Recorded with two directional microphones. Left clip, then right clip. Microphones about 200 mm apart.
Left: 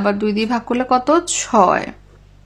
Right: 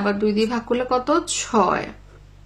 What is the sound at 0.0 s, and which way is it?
Speech, 40° left (ahead or behind).